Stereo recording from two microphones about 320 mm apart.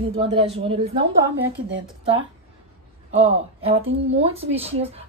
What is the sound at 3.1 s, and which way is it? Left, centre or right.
Speech, centre.